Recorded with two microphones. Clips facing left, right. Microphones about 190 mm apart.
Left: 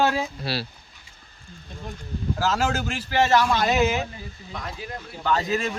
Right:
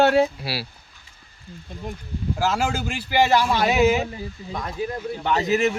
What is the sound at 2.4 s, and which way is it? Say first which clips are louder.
A man's voice: right 1 dB; 10° right (ahead or behind).